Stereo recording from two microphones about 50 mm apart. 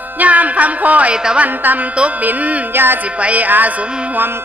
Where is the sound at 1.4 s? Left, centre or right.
Right.